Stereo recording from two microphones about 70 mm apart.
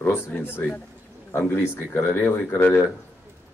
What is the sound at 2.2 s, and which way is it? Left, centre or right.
Speech, left.